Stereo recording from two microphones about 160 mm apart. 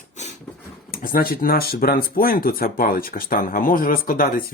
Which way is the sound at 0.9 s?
65° left (ahead or behind).